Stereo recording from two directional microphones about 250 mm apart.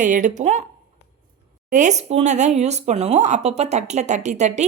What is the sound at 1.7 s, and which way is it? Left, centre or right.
Speech, right.